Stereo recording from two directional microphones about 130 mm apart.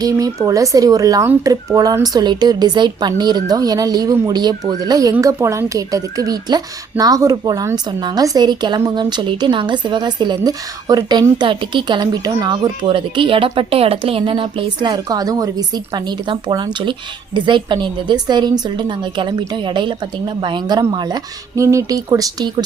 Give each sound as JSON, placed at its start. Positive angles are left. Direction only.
{"t": 0.4, "sound": "speech", "side_deg": -25}
{"t": 12.8, "sound": "speech", "side_deg": -40}